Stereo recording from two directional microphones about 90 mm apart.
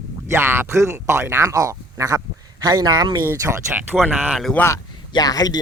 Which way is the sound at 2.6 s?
50° right (ahead or behind).